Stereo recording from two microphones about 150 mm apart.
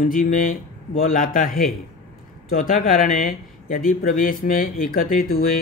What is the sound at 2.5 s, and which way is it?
Speech, 70° left (ahead or behind).